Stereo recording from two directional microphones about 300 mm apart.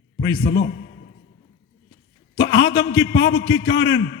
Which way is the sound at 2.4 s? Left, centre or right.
Left.